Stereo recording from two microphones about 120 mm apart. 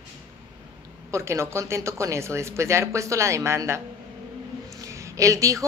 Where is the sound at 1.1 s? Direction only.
25° right (ahead or behind).